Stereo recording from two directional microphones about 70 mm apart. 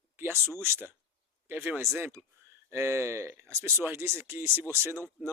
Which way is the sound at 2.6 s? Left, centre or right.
Right.